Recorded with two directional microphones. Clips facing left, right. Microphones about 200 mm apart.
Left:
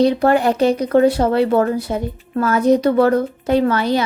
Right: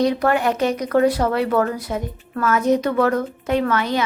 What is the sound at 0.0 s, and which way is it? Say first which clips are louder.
Speech: left 4 dB; 30° left (ahead or behind).